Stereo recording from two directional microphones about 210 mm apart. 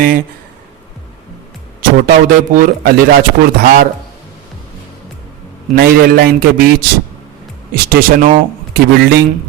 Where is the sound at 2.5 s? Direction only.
45° right (ahead or behind).